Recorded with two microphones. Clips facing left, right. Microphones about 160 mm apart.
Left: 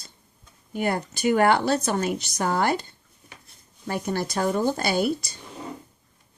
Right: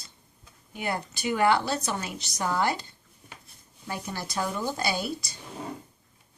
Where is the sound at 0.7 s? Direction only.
50° left (ahead or behind).